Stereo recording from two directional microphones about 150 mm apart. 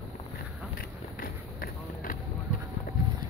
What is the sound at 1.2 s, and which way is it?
Run, 75° left (ahead or behind).